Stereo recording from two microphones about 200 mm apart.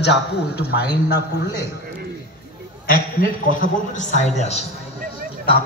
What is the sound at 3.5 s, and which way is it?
A man's voice, 35° left (ahead or behind).